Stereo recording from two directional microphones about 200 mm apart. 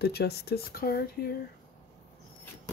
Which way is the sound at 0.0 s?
55° left (ahead or behind).